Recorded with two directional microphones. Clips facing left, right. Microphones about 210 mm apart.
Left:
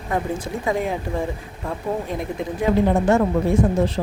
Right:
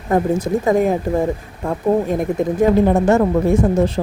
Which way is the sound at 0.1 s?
40° right (ahead or behind).